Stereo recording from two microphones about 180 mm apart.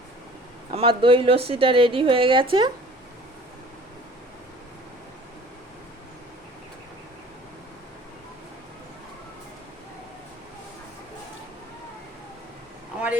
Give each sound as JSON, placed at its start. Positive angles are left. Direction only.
{"t": 0.7, "sound": "speech", "side_deg": -30}